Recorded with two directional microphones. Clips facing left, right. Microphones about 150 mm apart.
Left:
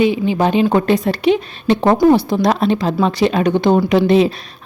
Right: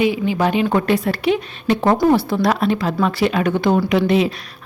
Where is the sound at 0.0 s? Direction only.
25° left (ahead or behind).